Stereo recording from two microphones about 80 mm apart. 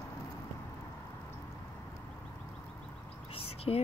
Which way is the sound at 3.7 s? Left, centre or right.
Left.